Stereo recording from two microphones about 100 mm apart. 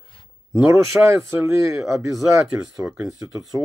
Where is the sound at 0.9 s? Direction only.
15° right (ahead or behind).